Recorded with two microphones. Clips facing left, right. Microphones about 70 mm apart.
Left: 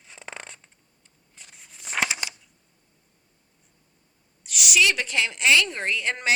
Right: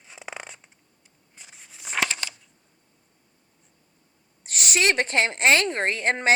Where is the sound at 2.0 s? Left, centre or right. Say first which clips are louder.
Even; centre.